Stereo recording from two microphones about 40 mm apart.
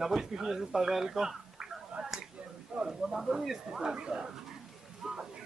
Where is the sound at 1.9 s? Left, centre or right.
Right.